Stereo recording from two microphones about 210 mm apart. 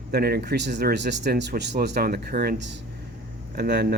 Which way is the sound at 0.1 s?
50° right (ahead or behind).